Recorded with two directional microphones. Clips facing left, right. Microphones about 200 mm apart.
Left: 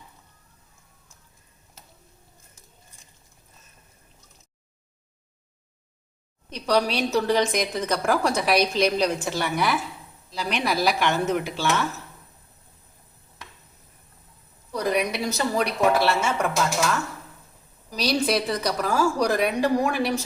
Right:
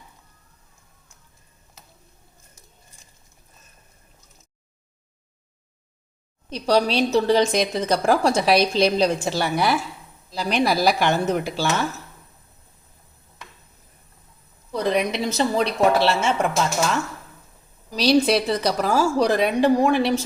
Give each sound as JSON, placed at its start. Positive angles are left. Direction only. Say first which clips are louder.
{"t": 6.5, "sound": "a woman's voice", "louder": "right 3 dB", "side_deg": -30}
{"t": 14.7, "sound": "a woman's voice", "louder": "right 2 dB", "side_deg": -25}
{"t": 17.9, "sound": "a woman's voice", "louder": "right 6 dB", "side_deg": -30}